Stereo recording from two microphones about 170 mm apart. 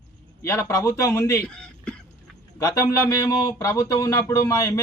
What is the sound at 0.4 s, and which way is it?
A man's voice, 15° left (ahead or behind).